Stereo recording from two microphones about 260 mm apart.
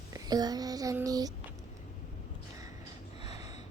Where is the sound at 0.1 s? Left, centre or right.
Centre.